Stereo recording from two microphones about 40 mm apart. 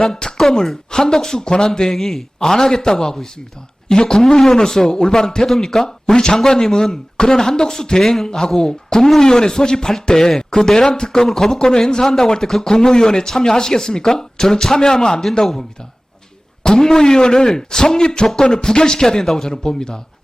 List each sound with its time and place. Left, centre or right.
0.0 s a sound: centre
0.9 s speech: centre
1.9 s speech: centre
16.6 s speech: centre